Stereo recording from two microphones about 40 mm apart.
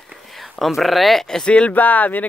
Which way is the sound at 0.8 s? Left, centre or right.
Centre.